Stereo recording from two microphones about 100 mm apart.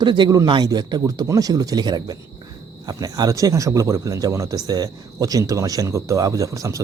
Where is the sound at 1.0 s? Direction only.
35° right (ahead or behind).